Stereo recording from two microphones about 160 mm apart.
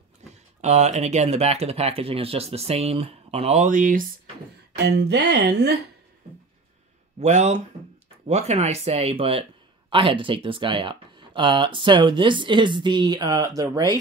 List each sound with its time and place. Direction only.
0.6 s a man's voice: 45° right (ahead or behind)
4.7 s speech: 90° right
7.2 s a man's voice: 45° right (ahead or behind); by 13.9 s 20° right (ahead or behind)